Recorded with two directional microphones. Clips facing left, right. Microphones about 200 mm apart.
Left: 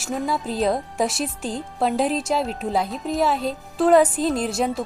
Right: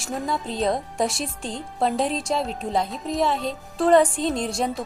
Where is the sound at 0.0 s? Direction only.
Centre (ahead or behind).